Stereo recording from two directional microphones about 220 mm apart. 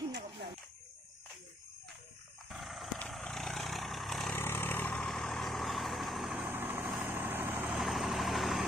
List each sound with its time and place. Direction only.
2.5 s vehicle: centre (ahead or behind)